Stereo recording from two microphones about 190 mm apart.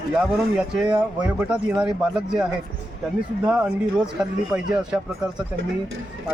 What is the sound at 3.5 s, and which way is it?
Speech, 5° right (ahead or behind).